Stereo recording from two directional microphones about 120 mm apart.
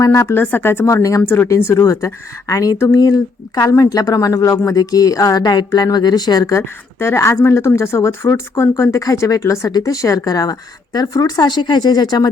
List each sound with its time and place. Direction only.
0.0 s speech: 25° left (ahead or behind)